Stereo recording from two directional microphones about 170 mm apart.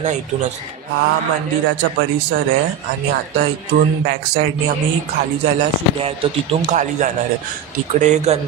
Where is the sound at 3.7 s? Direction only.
70° right (ahead or behind).